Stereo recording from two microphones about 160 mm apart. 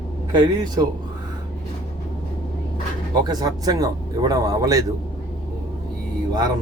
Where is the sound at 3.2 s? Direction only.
25° right (ahead or behind).